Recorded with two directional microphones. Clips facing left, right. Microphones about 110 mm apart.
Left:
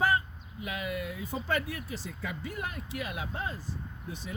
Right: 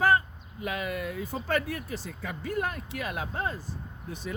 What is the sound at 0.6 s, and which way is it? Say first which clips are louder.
Speech: right 3 dB; 50° right (ahead or behind).